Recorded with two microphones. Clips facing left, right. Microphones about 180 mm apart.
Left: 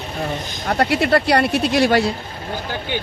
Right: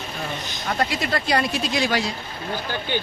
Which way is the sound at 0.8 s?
65° left (ahead or behind).